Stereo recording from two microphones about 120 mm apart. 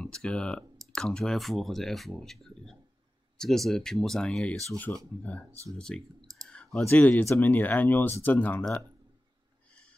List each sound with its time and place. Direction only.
0.0 s speech: 5° left (ahead or behind)
6.4 s clicking: 5° left (ahead or behind)
6.8 s speech: 15° left (ahead or behind)